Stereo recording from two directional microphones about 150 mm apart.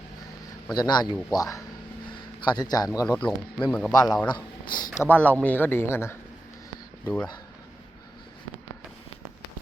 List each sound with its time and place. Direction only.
0.7 s a man's voice: 30° left (ahead or behind)
3.7 s a man's voice: 5° left (ahead or behind)
3.9 s a man's voice: 25° left (ahead or behind)
4.9 s speech: 10° left (ahead or behind)